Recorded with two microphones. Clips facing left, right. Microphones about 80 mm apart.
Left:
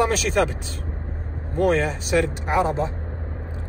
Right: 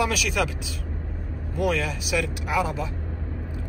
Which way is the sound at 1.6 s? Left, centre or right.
Left.